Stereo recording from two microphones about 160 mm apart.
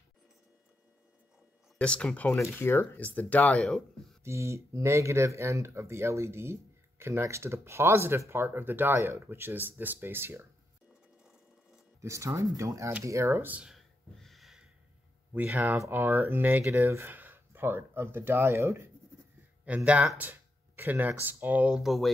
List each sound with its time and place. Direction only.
1.8 s speech: 5° left (ahead or behind)
4.2 s speech: 15° right (ahead or behind)
12.0 s speech: 15° right (ahead or behind)
13.0 s a sound: 20° right (ahead or behind); by 14.7 s centre (ahead or behind)
15.3 s speech: 10° right (ahead or behind)